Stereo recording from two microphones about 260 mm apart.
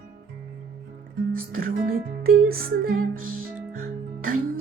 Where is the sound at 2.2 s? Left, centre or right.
Right.